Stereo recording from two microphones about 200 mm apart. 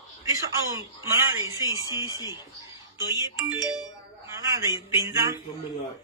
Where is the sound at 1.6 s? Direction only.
15° left (ahead or behind).